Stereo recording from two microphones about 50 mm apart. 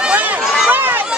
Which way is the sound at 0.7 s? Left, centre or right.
Right.